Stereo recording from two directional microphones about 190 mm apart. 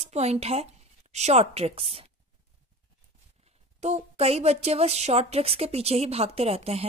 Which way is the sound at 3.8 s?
35° right (ahead or behind).